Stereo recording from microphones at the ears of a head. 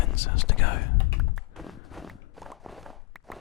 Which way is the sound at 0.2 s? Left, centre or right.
Left.